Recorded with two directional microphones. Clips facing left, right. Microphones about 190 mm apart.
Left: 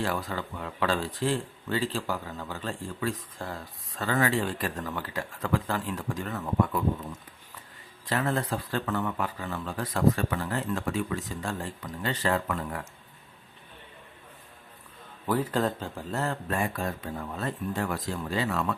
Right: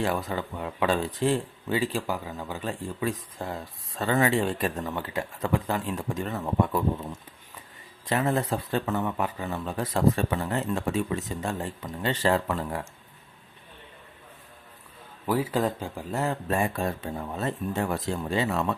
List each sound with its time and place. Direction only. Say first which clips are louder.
0.0 s speech: right 3 dB; 20° right (ahead or behind)
8.0 s speech: right 3 dB; 20° right (ahead or behind)
15.3 s speech: right 1 dB; 10° right (ahead or behind); by 18.8 s 25° right (ahead or behind)